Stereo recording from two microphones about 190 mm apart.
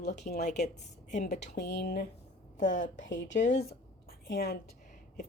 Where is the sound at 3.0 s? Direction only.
70° left (ahead or behind).